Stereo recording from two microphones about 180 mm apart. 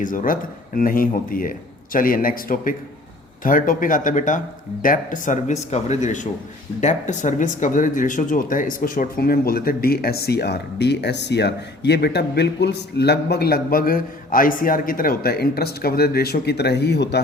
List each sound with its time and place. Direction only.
0.0 s speech: 45° left (ahead or behind); by 17.2 s 70° left (ahead or behind)